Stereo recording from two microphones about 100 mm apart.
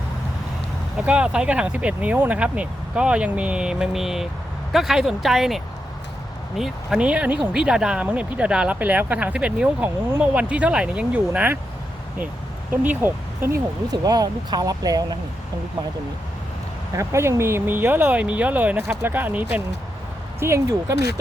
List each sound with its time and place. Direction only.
1.0 s speech: 10° right (ahead or behind)
12.7 s speech: 20° right (ahead or behind)
13.9 s speech: 40° right (ahead or behind)
16.9 s speech: 30° right (ahead or behind)
20.4 s speech: 30° right (ahead or behind)